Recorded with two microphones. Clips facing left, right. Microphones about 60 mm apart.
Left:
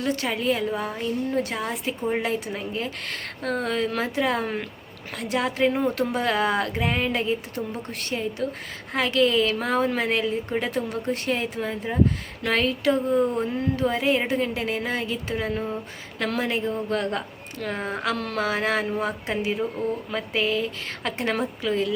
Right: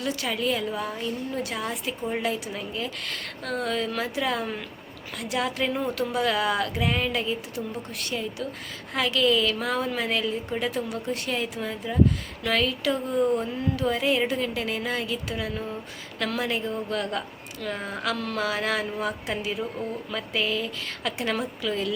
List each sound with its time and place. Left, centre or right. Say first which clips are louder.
0.0 s a woman's voice: left 2 dB; left